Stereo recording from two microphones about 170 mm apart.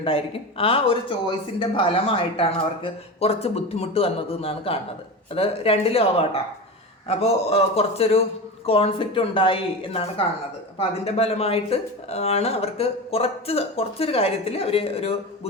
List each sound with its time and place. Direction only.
0.6 s speech: 35° left (ahead or behind)